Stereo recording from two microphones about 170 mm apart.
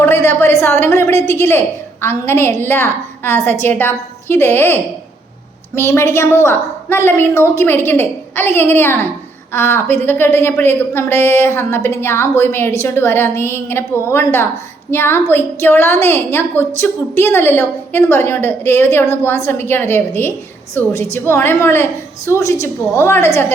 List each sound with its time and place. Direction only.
0.0 s a woman's voice: 15° left (ahead or behind)